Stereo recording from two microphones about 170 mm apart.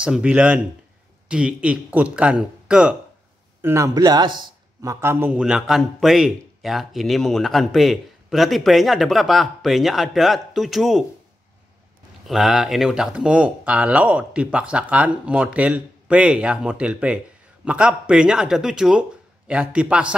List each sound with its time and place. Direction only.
0.0 s speech: 5° right (ahead or behind)
3.6 s a man's voice: 15° right (ahead or behind)
5.0 s a man's voice: 10° right (ahead or behind)
12.3 s a man's voice: 5° right (ahead or behind)